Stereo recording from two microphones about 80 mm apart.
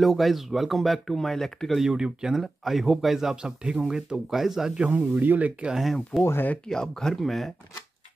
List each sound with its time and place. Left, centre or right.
0.0 s speech: centre
6.2 s speech: left
6.7 s speech: centre